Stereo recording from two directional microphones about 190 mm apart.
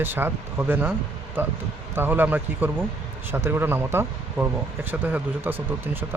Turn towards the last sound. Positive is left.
turn(degrees=-10)  # may be behind; listen again after turning